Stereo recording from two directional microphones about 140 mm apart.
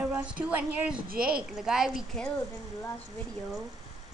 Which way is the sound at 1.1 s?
90° right.